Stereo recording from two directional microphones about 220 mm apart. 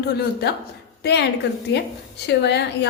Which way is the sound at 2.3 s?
50° left (ahead or behind).